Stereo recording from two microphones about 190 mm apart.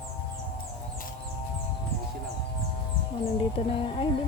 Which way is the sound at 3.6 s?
35° left (ahead or behind).